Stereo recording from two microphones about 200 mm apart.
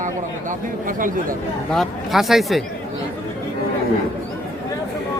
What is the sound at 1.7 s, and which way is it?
Speech, centre (ahead or behind).